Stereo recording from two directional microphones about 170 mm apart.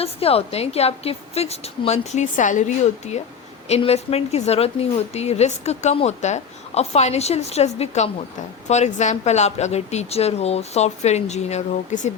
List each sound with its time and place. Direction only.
0.0 s a woman's voice: 35° left (ahead or behind)